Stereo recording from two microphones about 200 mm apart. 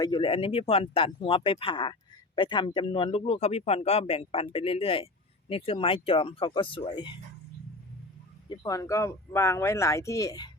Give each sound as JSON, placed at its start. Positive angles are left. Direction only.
{"t": 0.0, "sound": "speech", "side_deg": 25}
{"t": 8.4, "sound": "speech", "side_deg": 15}